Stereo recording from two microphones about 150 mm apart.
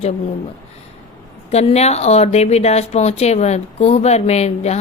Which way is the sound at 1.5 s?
45° left (ahead or behind).